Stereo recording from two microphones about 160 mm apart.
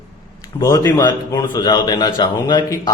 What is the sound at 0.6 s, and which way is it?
A man's voice, 20° left (ahead or behind).